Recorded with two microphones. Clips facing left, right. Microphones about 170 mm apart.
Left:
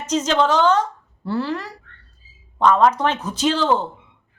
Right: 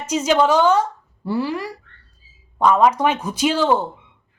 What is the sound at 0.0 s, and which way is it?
A woman's voice, 10° right (ahead or behind).